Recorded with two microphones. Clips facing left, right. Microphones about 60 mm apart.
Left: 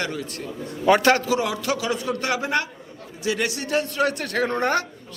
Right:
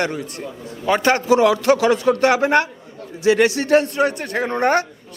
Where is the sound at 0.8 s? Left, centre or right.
Centre.